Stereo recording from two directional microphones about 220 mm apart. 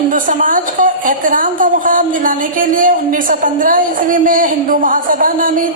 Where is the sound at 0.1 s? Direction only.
40° right (ahead or behind).